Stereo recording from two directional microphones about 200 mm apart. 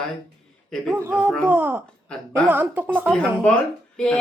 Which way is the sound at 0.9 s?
10° right (ahead or behind).